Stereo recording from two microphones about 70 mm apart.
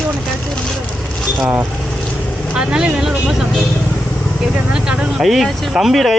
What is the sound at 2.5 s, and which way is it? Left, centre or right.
Speech, centre.